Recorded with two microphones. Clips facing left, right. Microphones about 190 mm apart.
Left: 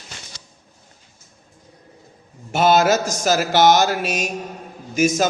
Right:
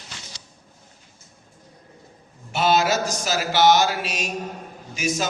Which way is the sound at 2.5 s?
45° left (ahead or behind).